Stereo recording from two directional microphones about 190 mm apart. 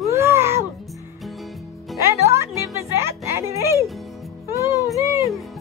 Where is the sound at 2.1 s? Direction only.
15° right (ahead or behind).